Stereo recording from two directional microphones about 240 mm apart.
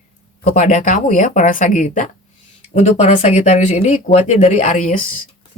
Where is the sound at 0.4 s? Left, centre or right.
Left.